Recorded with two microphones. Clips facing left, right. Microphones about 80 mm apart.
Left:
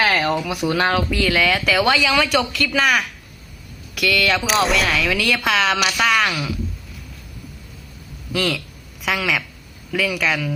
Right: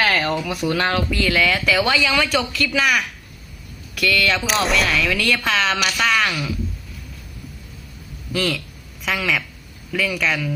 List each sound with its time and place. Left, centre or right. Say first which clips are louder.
0.0 s speech: left 1 dB; centre
1.3 s speech: even; left
1.6 s speech: left 1 dB; left
1.9 s speech: left 2 dB; left
2.7 s speech: left 1 dB; left
3.9 s speech: left 1 dB; left
4.4 s speech: left 1 dB; centre
4.9 s speech: even; left
5.1 s speech: left 1 dB; left
6.2 s speech: left 1 dB; centre
8.3 s speech: left 1 dB; centre
9.0 s speech: left 1 dB; left